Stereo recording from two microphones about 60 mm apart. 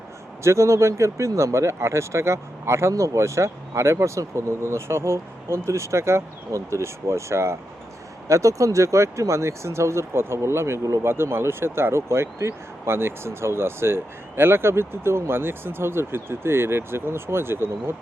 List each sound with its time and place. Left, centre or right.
0.4 s speech: right
2.9 s speech: right
8.3 s speech: right